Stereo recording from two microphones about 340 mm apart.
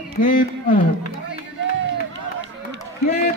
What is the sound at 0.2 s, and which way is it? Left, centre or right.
Speech, left.